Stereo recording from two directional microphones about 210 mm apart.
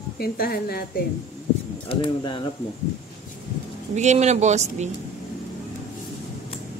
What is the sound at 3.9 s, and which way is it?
Speech, 35° right (ahead or behind).